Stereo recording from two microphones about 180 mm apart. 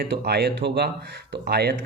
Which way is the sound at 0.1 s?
65° right (ahead or behind).